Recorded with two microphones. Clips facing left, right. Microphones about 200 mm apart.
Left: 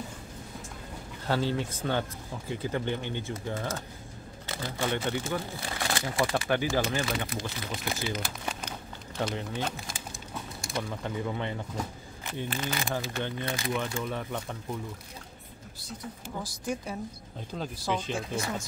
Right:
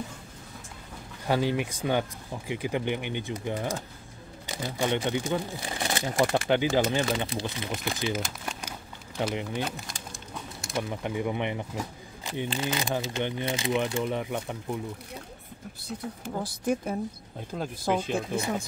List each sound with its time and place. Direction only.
1.2 s speech: 15° right (ahead or behind)
7.2 s speech: 30° right (ahead or behind)
7.7 s speech: centre (ahead or behind)
9.2 s speech: 15° right (ahead or behind)
9.6 s crumpling: centre (ahead or behind)
10.8 s speech: 15° right (ahead or behind)
16.3 s speech: 50° right (ahead or behind)